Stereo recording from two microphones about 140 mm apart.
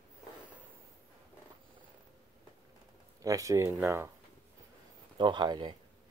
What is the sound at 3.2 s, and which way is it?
Speech, 25° right (ahead or behind).